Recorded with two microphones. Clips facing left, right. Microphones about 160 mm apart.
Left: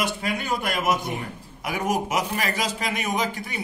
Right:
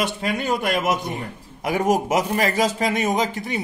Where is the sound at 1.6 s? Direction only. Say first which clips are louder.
Right 5 dB; 40° right (ahead or behind).